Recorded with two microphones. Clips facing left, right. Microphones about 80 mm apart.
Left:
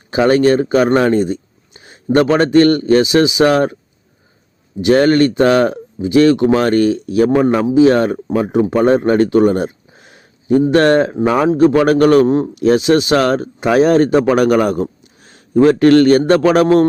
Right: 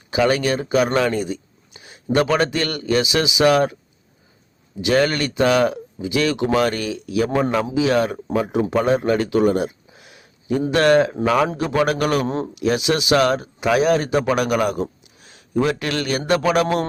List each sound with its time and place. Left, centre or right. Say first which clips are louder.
0.1 s speech: left 7 dB; left
0.9 s a sound: left 7 dB; left
2.1 s speech: left 8 dB; left
4.8 s speech: left 8 dB; left
7.3 s a man's voice: left 7 dB; centre
7.7 s speech: left 8 dB; left
8.8 s a sound: left 7 dB; left
10.7 s a man's voice: left 1 dB; left